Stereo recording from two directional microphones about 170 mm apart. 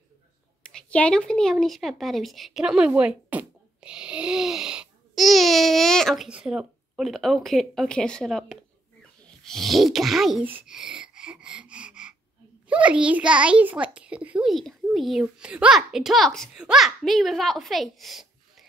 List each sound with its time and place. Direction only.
0.7 s a child's voice: 5° left (ahead or behind)
10.4 s a sound: 10° right (ahead or behind)
12.6 s a child's voice: 5° right (ahead or behind)